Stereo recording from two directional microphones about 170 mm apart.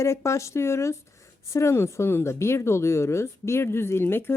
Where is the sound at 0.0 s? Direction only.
15° left (ahead or behind).